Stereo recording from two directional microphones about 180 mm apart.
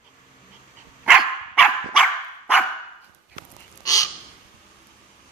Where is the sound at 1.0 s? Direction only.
5° right (ahead or behind).